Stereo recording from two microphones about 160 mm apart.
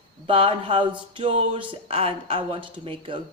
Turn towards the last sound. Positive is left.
turn(degrees=-35)  # may be behind; listen again after turning